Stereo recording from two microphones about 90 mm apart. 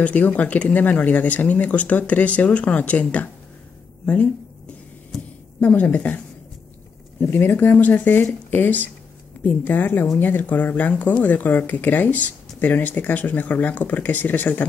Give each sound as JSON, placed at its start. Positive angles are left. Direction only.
{"t": 0.0, "sound": "speech", "side_deg": 15}
{"t": 5.6, "sound": "speech", "side_deg": 15}